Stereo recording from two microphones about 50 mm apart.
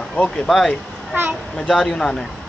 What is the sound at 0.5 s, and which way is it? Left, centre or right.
Speech, centre.